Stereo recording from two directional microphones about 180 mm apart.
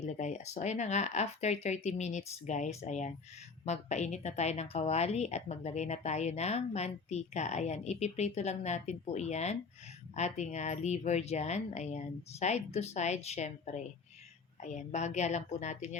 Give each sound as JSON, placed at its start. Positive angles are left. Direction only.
{"t": 0.0, "sound": "speech", "side_deg": 40}